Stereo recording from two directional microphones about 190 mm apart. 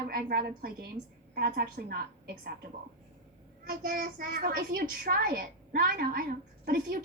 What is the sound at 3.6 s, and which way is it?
A child's voice, 50° right (ahead or behind).